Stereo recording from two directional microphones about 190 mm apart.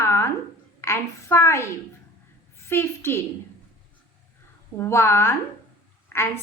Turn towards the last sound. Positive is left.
turn(degrees=15)  # may be behind; listen again after turning